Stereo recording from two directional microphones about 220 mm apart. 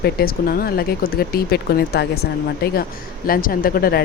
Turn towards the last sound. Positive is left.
turn(degrees=45)  # may be behind; listen again after turning